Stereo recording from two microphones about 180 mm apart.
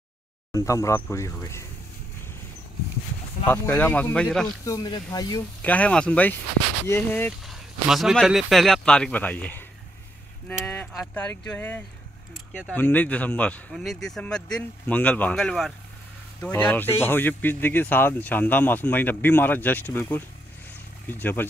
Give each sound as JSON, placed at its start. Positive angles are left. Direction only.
{"t": 0.5, "sound": "speech", "side_deg": 20}
{"t": 3.4, "sound": "speech", "side_deg": 10}
{"t": 4.6, "sound": "speech", "side_deg": 20}
{"t": 5.6, "sound": "speech", "side_deg": 10}
{"t": 7.4, "sound": "speech", "side_deg": 0}
{"t": 10.7, "sound": "speech", "side_deg": 5}